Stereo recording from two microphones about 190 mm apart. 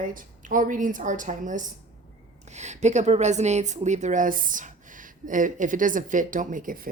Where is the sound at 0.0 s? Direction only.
45° right (ahead or behind).